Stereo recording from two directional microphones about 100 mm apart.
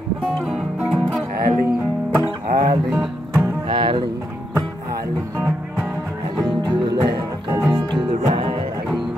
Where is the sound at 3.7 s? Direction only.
50° right (ahead or behind).